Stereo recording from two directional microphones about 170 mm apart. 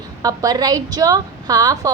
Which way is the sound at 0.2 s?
20° right (ahead or behind).